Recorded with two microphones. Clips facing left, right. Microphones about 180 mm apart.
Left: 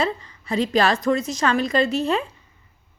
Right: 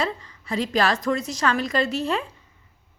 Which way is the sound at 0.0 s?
25° left (ahead or behind).